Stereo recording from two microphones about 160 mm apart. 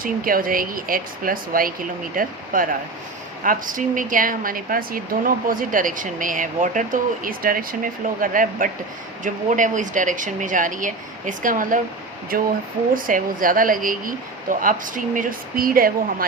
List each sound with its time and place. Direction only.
0.0 s speech: 60° right (ahead or behind)